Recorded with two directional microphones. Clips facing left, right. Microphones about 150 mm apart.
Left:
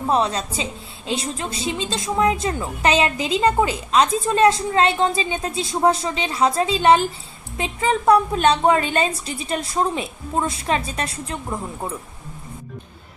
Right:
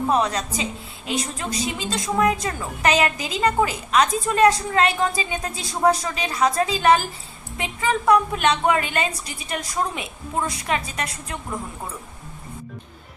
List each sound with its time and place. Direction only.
0.1 s a woman's voice: 30° left (ahead or behind)